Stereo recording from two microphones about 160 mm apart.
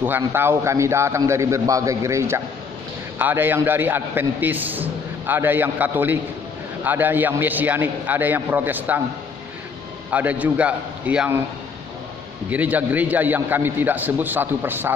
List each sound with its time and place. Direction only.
0.0 s a man's voice: 15° right (ahead or behind)
10.1 s a man's voice: 10° right (ahead or behind)
12.4 s a man's voice: 10° right (ahead or behind)